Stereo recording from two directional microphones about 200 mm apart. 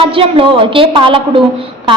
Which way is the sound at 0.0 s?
25° right (ahead or behind).